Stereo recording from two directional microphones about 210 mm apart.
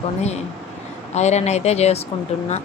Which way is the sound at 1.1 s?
30° left (ahead or behind).